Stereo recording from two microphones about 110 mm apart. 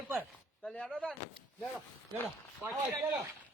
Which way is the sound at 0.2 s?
10° left (ahead or behind).